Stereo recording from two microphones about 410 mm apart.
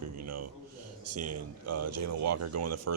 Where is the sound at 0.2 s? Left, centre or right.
Right.